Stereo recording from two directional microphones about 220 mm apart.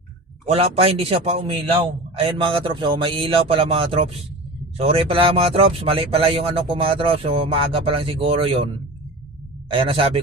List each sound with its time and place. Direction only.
0.4 s speech: 25° right (ahead or behind)